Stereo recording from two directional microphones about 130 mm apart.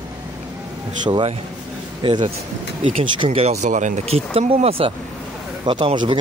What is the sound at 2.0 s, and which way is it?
A man's voice, 40° right (ahead or behind).